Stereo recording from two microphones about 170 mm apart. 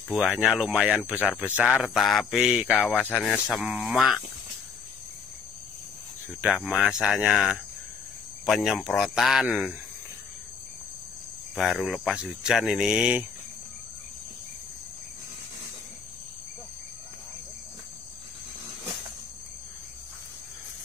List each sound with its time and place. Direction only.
0.1 s speech: centre (ahead or behind)
2.9 s speech: 10° left (ahead or behind)
6.4 s speech: 5° right (ahead or behind)
11.5 s speech: centre (ahead or behind)